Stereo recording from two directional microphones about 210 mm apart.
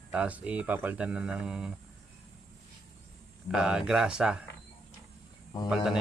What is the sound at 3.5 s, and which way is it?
Speech, 5° right (ahead or behind).